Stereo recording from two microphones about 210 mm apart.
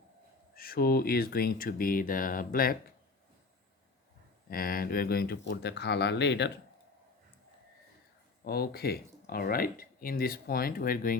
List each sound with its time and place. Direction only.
0.5 s speech: 45° left (ahead or behind)
4.4 s speech: 45° left (ahead or behind)
8.4 s speech: 45° left (ahead or behind)